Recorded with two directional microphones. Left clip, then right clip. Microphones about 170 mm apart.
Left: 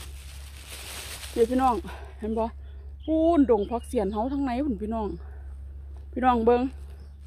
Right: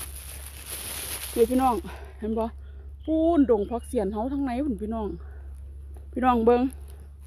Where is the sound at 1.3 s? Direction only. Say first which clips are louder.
Right 1 dB; 20° right (ahead or behind).